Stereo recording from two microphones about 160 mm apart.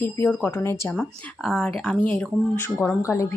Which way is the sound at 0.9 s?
5° left (ahead or behind).